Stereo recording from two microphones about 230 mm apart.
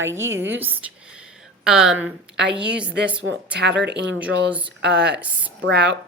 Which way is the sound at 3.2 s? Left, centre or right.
Right.